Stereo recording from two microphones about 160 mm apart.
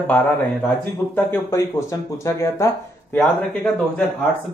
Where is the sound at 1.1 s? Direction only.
15° left (ahead or behind).